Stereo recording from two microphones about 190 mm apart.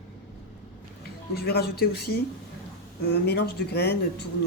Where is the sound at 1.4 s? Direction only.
55° left (ahead or behind).